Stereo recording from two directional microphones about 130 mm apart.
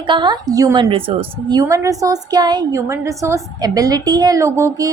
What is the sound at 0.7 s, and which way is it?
Speech, 40° right (ahead or behind).